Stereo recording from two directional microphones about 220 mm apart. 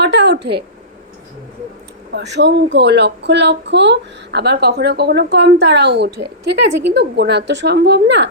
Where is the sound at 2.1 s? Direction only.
50° right (ahead or behind).